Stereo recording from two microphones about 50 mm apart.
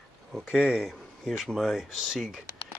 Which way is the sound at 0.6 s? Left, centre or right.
Centre.